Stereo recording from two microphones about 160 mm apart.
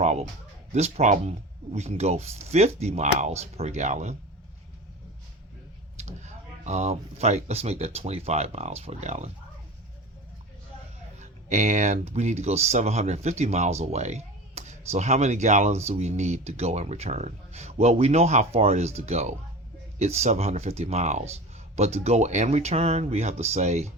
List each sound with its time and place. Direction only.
0.0 s a sound: 45° right (ahead or behind)
0.7 s speech: 45° right (ahead or behind)
6.0 s speech: 45° right (ahead or behind)
11.2 s speech: 45° right (ahead or behind)